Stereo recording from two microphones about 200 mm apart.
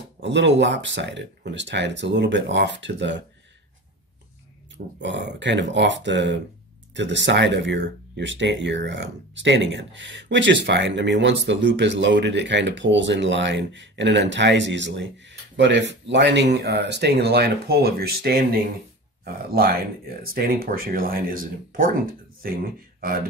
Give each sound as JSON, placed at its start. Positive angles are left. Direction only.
{"t": 0.2, "sound": "speech", "side_deg": -60}
{"t": 5.0, "sound": "speech", "side_deg": -60}
{"t": 20.2, "sound": "speech", "side_deg": -45}
{"t": 22.9, "sound": "a sound", "side_deg": -45}